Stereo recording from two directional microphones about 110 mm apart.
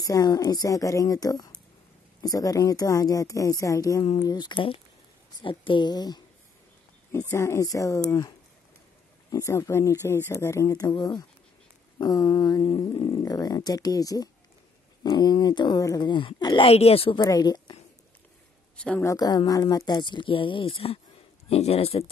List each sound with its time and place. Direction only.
0.0 s speech: 35° left (ahead or behind)
7.1 s speech: 25° left (ahead or behind)
9.3 s speech: 25° left (ahead or behind)
12.6 s speech: 50° left (ahead or behind)
13.2 s speech: 35° left (ahead or behind)
16.6 s a woman's voice: 65° left (ahead or behind)
17.2 s speech: 35° left (ahead or behind)
18.8 s speech: 10° left (ahead or behind)
19.0 s speech: 35° left (ahead or behind); by 22.1 s 65° left (ahead or behind)